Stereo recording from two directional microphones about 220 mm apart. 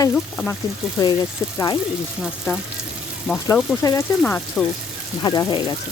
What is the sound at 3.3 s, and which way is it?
Speech, 5° right (ahead or behind).